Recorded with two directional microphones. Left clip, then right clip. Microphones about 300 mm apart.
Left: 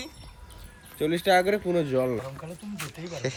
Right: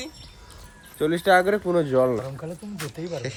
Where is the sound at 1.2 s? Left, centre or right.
Centre.